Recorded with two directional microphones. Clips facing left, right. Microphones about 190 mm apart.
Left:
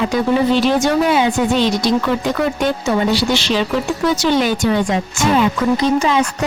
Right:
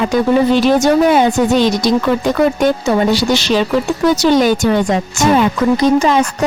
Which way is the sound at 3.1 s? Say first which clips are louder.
Right 3 dB; 40° right (ahead or behind).